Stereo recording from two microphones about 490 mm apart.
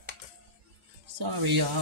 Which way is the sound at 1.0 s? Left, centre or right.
Right.